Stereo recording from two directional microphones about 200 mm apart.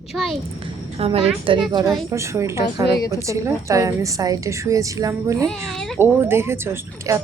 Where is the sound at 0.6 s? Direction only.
30° right (ahead or behind).